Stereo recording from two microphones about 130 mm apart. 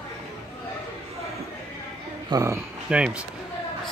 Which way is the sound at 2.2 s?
25° right (ahead or behind).